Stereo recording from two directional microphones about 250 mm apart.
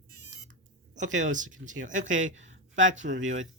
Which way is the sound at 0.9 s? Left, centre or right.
Right.